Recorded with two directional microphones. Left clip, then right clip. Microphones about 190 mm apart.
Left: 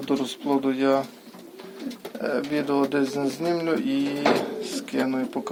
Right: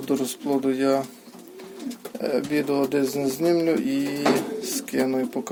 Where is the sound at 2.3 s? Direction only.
40° right (ahead or behind).